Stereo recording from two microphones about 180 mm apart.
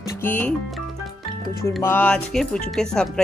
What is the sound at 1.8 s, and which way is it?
Speech, 10° left (ahead or behind).